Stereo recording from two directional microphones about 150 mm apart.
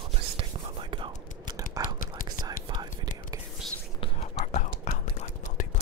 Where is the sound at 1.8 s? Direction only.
25° right (ahead or behind).